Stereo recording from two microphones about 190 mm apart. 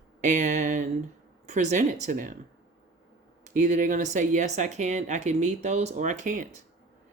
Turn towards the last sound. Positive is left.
turn(degrees=-40)  # may be behind; listen again after turning